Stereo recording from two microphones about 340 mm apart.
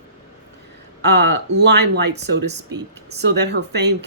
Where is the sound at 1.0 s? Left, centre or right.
Right.